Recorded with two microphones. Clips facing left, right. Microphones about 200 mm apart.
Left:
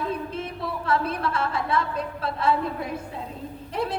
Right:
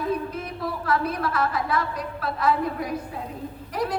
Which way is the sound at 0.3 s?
25° left (ahead or behind).